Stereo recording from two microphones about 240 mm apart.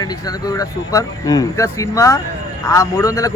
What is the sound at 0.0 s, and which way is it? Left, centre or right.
A man's voice, centre.